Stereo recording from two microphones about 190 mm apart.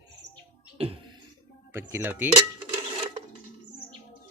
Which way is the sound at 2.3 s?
25° right (ahead or behind).